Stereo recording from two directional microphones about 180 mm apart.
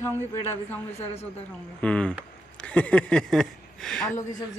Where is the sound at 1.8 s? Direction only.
5° left (ahead or behind).